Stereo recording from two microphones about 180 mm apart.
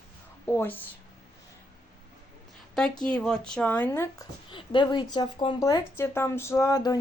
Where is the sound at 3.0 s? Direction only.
5° left (ahead or behind).